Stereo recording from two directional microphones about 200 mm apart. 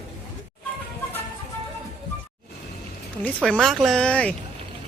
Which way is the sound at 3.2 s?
5° left (ahead or behind).